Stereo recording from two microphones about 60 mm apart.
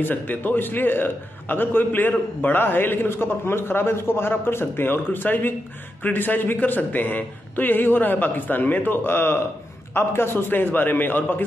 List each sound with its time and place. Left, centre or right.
0.0 s a man's voice: left